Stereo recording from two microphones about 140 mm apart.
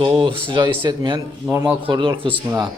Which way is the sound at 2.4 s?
25° right (ahead or behind).